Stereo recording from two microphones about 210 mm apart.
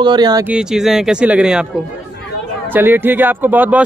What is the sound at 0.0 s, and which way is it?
Speech, 20° right (ahead or behind).